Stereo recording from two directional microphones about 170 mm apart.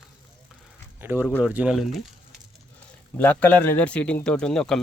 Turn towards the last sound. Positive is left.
turn(degrees=5)  # may be behind; listen again after turning